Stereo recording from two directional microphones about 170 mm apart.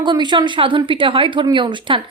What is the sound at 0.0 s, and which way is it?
Speech, 25° right (ahead or behind).